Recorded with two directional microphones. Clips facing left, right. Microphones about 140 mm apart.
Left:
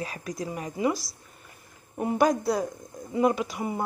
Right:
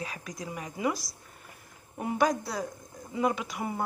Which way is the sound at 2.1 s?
50° left (ahead or behind).